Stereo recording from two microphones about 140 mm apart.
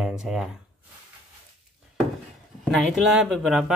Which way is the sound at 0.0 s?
5° right (ahead or behind).